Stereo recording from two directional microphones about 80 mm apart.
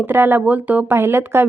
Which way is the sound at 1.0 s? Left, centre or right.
Right.